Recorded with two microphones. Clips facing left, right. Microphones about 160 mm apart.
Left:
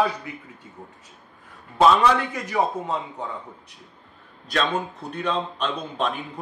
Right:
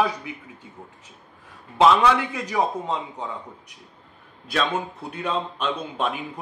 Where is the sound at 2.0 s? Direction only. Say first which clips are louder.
Even; 15° right (ahead or behind).